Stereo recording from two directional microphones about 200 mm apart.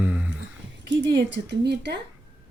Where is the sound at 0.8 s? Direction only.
60° right (ahead or behind).